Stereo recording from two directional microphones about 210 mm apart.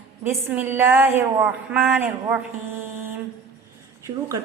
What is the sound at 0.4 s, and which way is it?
A woman's voice, 10° right (ahead or behind).